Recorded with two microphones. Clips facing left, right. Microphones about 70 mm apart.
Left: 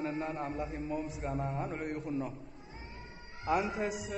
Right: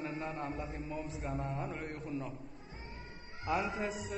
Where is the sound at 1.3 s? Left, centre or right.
Left.